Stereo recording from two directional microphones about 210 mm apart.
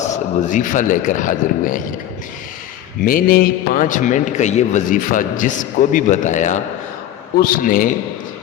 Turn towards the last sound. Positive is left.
turn(degrees=40)  # may be behind; listen again after turning